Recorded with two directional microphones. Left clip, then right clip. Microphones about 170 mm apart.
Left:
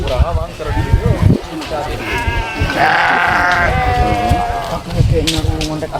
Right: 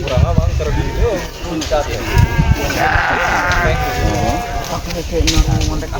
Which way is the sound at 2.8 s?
50° left (ahead or behind).